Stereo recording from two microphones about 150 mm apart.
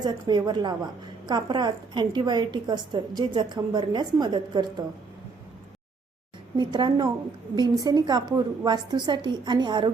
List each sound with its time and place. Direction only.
0.0 s a woman's voice: 30° right (ahead or behind)
6.6 s a woman's voice: 30° right (ahead or behind)